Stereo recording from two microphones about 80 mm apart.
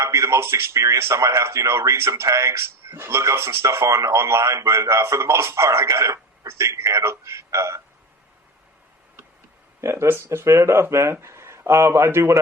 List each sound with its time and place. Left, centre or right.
0.0 s speech: right
9.8 s speech: right